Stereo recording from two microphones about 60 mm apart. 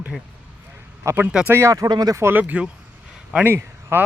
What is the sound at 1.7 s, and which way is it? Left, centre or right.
Speech, right.